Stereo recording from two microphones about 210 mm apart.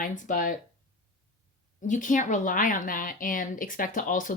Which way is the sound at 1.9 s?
40° left (ahead or behind).